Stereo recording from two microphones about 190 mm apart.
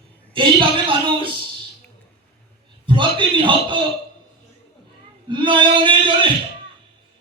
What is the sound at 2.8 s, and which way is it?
A man's voice, 25° right (ahead or behind).